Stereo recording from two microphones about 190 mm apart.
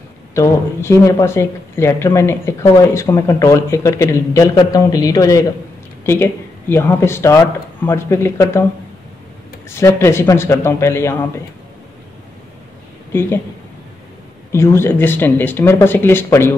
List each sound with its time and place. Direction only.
0.3 s speech: 15° left (ahead or behind)
9.7 s speech: 15° left (ahead or behind)
13.1 s speech: 10° left (ahead or behind)
14.5 s speech: 15° left (ahead or behind)